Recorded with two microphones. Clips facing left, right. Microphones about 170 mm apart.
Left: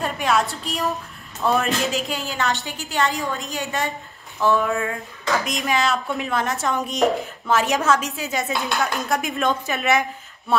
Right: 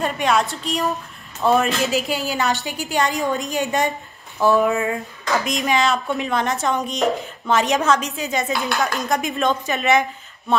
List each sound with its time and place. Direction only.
0.0 s a woman's voice: centre (ahead or behind)